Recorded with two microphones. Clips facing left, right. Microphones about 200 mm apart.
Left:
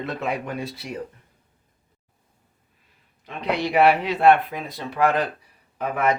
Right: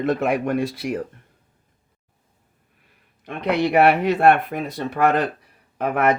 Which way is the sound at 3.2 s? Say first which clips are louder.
Right 4 dB; 55° right (ahead or behind).